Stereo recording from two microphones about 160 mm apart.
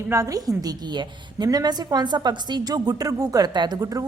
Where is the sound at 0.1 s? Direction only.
20° right (ahead or behind).